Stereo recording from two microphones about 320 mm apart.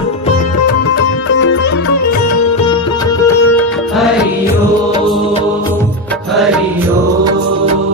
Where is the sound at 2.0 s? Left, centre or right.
Left.